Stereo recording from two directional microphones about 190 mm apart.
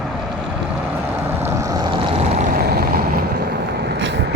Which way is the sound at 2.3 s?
45° right (ahead or behind).